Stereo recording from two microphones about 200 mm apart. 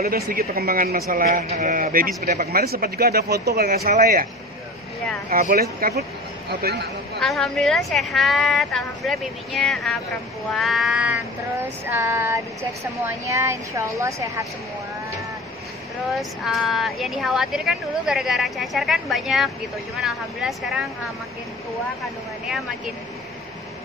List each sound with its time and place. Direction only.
0.0 s speech: 50° right (ahead or behind)
5.3 s speech: 50° right (ahead or behind)
7.2 s speech: centre (ahead or behind); by 14.5 s 15° right (ahead or behind)
16.1 s speech: centre (ahead or behind)